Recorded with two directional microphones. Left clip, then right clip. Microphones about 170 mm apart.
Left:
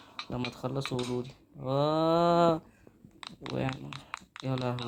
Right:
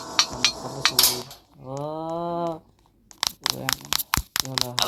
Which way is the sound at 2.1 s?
10° left (ahead or behind).